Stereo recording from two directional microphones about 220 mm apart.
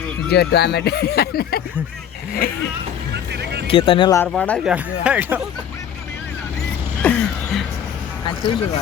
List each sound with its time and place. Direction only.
0.3 s speech: 50° left (ahead or behind)
3.7 s speech: 25° left (ahead or behind)
4.3 s speech: 5° left (ahead or behind)
4.7 s speech: 5° right (ahead or behind)
7.0 s a sound: 5° left (ahead or behind)